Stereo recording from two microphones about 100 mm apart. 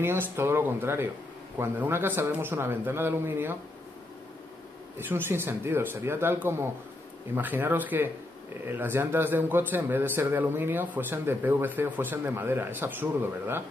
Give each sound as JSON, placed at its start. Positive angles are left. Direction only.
{"t": 0.0, "sound": "a man's voice", "side_deg": -20}
{"t": 4.9, "sound": "a man's voice", "side_deg": -20}